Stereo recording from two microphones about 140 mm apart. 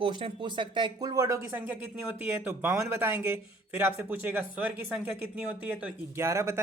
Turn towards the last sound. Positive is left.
turn(degrees=-20)  # may be behind; listen again after turning